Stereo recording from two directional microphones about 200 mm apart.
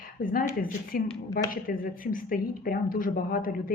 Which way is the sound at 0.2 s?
45° left (ahead or behind).